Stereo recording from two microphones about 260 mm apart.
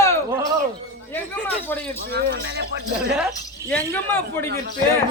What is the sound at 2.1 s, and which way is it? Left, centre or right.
Speech, right.